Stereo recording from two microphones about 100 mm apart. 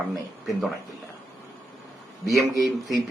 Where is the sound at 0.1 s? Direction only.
Centre (ahead or behind).